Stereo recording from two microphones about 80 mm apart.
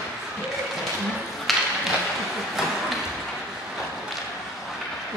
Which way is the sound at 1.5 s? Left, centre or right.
Centre.